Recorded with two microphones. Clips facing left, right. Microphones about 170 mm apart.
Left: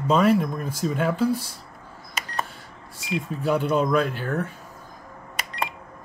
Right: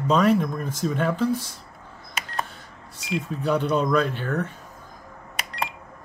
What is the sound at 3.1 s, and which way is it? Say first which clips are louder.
Speech: even; 5° left (ahead or behind).